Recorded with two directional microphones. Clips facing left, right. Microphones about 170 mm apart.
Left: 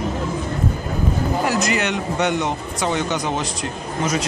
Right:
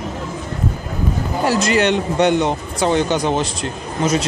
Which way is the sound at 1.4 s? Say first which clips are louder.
Right 8 dB; 30° right (ahead or behind).